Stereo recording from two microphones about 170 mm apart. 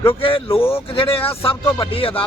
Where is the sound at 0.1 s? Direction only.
30° left (ahead or behind).